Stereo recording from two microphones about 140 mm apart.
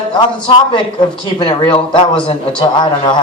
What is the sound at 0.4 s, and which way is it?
A man's voice, 35° left (ahead or behind).